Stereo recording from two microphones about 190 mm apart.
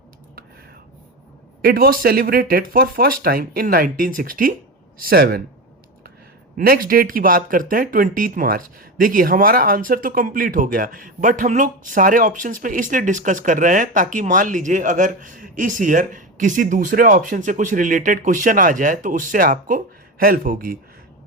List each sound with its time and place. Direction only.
1.6 s speech: 50° right (ahead or behind)
6.6 s speech: 50° right (ahead or behind)